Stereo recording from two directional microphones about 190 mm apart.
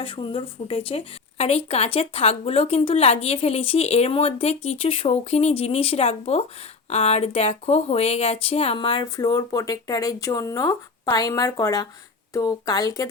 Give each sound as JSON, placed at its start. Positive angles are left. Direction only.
{"t": 0.0, "sound": "speech", "side_deg": 25}